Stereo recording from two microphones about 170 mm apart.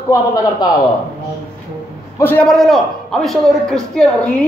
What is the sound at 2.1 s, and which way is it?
A man's voice, 10° left (ahead or behind).